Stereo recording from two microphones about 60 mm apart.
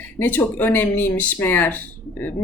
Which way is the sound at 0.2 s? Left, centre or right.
Left.